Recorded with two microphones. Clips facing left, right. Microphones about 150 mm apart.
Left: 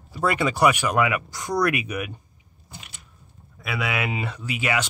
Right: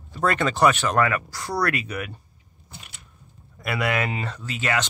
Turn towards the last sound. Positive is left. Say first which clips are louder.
# even
turn(degrees=10)  # may be behind; listen again after turning